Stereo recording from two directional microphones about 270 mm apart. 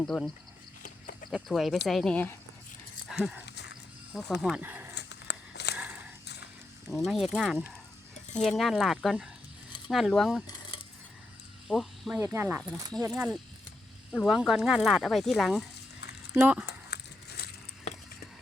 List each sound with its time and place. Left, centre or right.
0.0 s speech: centre
0.8 s goat: left
1.3 s speech: centre
3.4 s a sound: left
4.4 s speech: centre
4.9 s a sound: left
5.7 s a sound: centre
6.8 s speech: centre
10.4 s coin: centre
11.7 s speech: centre
14.1 s speech: centre
16.6 s a sound: left